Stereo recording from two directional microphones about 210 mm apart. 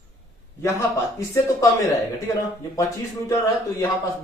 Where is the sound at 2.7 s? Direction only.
15° left (ahead or behind).